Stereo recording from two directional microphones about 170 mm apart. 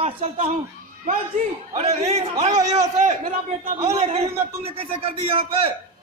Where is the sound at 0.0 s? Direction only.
40° right (ahead or behind).